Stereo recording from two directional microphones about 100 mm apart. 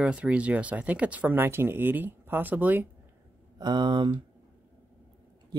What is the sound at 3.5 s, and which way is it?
Speech, 45° right (ahead or behind).